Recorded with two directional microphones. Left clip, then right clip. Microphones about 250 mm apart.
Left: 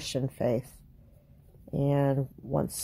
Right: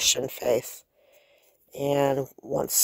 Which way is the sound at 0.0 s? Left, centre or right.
Right.